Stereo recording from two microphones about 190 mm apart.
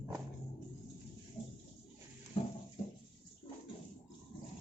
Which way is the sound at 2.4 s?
30° left (ahead or behind).